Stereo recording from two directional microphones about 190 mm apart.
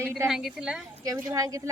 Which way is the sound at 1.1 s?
15° right (ahead or behind).